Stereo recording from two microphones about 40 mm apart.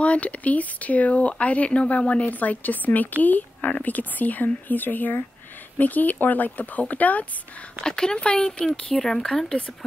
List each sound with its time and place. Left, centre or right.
0.0 s speech: left
7.8 s speech: centre